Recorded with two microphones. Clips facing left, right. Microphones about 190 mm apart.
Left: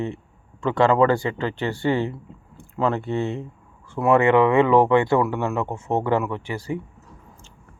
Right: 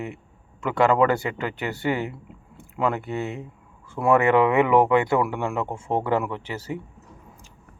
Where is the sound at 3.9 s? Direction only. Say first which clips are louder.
Left 2 dB; 20° left (ahead or behind).